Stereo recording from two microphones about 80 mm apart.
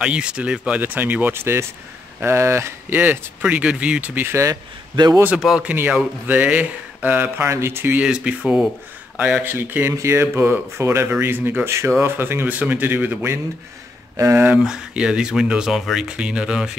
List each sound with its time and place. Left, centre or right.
0.0 s speech: centre; by 3.0 s right
3.0 s speech: centre
4.3 s speech: right
4.9 s a man's voice: right
5.4 s speech: centre
5.7 s speech: centre
7.4 s speech: right
8.0 s speech: centre
9.8 s speech: right
14.1 s speech: right
14.6 s speech: centre